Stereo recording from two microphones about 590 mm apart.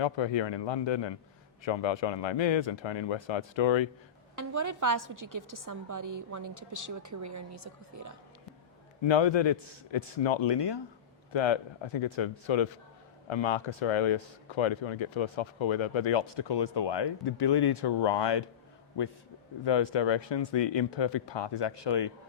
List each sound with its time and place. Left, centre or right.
0.0 s speech: left
4.4 s a woman's voice: right
9.0 s speech: left
19.6 s speech: left